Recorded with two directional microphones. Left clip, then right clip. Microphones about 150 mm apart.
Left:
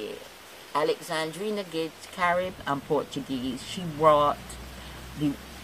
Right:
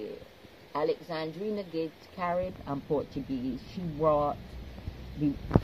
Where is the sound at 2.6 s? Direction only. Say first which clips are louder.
Left 5 dB; 40° left (ahead or behind).